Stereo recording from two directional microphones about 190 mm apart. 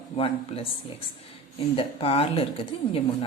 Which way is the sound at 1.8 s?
30° left (ahead or behind).